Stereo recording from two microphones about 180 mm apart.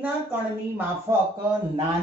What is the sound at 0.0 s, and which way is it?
Speech, 10° right (ahead or behind).